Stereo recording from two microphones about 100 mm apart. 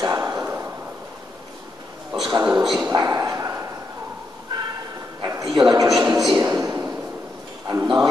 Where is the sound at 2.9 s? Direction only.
30° right (ahead or behind).